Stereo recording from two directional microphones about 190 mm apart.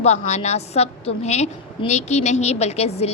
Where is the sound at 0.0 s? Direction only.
35° left (ahead or behind).